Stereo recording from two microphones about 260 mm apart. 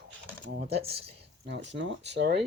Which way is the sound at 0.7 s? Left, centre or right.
Right.